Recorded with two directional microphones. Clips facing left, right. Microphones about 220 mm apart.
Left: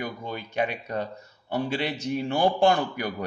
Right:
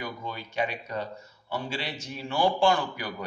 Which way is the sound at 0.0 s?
50° left (ahead or behind).